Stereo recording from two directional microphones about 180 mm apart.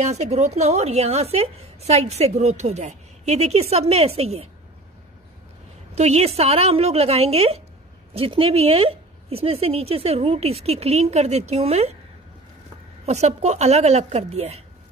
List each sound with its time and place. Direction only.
0.0 s a woman's voice: 40° right (ahead or behind)
5.9 s a woman's voice: 35° right (ahead or behind)
13.0 s a woman's voice: 40° right (ahead or behind)